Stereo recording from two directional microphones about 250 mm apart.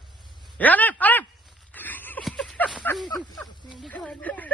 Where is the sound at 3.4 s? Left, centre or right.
Centre.